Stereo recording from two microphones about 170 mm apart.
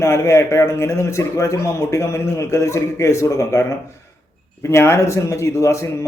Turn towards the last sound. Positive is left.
turn(degrees=15)  # may be behind; listen again after turning